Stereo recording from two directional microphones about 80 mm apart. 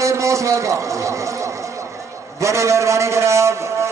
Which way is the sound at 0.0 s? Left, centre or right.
Right.